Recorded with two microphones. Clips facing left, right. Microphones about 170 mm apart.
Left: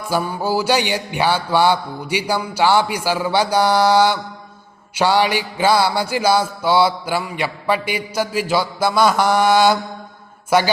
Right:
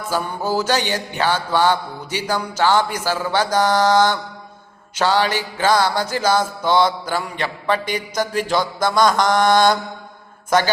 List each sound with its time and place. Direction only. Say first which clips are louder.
0.1 s music: left 2 dB; 10° left (ahead or behind)